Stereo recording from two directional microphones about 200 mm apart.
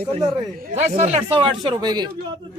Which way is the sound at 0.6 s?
35° right (ahead or behind).